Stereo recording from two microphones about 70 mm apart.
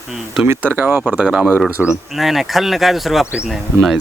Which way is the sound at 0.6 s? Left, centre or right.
Right.